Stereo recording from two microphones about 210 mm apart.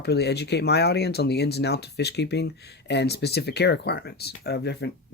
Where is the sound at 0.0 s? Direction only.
50° left (ahead or behind).